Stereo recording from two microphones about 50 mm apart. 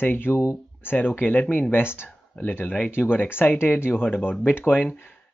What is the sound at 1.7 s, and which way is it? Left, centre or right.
Speech, left.